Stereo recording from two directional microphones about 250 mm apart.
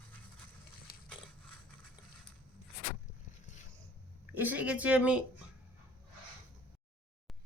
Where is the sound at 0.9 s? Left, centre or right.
Left.